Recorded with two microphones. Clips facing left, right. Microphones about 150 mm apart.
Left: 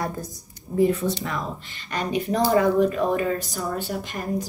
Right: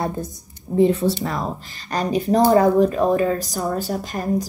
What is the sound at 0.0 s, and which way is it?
A woman's voice, 25° right (ahead or behind).